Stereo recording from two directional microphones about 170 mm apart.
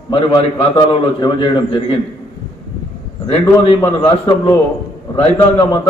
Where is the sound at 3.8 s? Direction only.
10° left (ahead or behind).